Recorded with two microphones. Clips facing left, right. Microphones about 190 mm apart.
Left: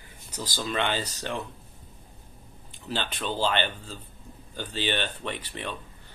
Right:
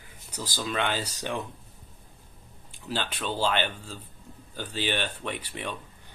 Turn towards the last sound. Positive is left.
turn(degrees=-10)  # may be behind; listen again after turning